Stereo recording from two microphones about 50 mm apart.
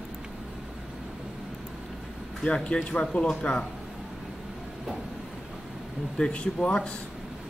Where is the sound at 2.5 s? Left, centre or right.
Centre.